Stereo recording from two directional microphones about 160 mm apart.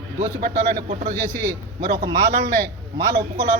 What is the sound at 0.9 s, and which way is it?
Speech, 50° right (ahead or behind).